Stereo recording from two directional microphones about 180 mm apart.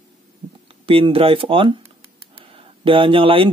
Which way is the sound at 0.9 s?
30° right (ahead or behind).